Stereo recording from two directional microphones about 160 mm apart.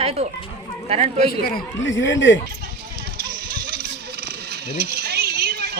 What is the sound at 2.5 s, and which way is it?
Vehicle, 65° right (ahead or behind).